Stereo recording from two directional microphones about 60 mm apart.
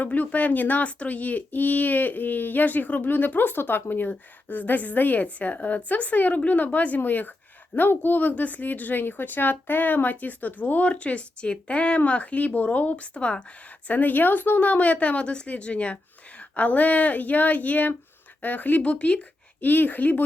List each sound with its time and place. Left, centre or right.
0.0 s speech: left